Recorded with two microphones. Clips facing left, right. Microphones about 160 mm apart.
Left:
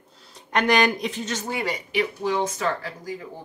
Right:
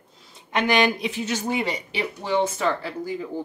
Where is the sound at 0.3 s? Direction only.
Centre (ahead or behind).